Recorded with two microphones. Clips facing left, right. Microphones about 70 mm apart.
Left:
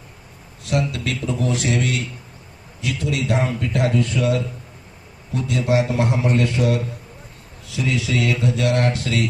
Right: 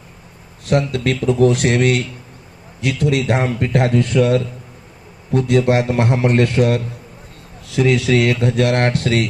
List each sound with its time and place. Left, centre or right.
0.6 s speech: right